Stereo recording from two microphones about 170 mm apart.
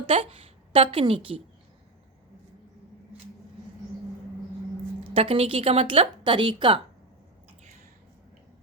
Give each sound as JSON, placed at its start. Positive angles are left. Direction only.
{"t": 0.1, "sound": "a woman's voice", "side_deg": -35}
{"t": 5.1, "sound": "speech", "side_deg": -35}